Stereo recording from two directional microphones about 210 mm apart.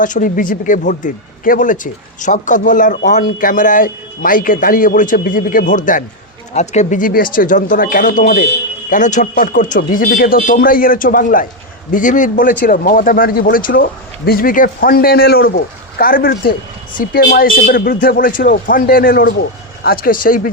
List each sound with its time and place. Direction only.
0.0 s speech: 40° left (ahead or behind)